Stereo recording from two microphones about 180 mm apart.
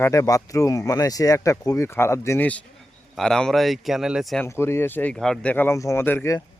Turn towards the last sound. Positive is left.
turn(degrees=15)  # may be behind; listen again after turning